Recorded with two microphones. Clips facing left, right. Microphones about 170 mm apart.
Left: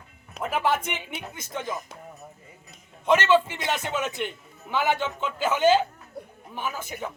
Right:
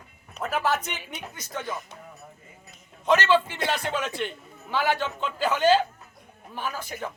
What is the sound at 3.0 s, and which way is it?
A man's voice, 10° left (ahead or behind).